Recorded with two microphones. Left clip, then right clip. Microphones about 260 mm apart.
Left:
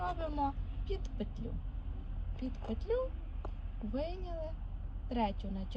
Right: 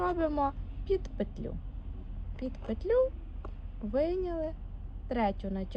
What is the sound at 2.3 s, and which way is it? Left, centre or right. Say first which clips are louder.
Speech: right 5 dB; right.